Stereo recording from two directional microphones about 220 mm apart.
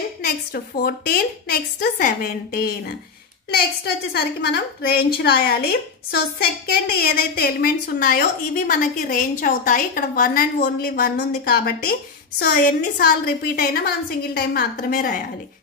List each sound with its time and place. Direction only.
0.2 s a woman's voice: 45° left (ahead or behind)